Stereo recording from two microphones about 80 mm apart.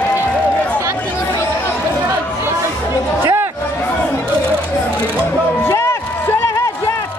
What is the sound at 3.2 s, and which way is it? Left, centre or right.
Chatter, right.